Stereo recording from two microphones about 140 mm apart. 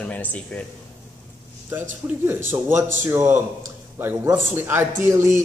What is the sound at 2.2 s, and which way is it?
Speech, 15° right (ahead or behind).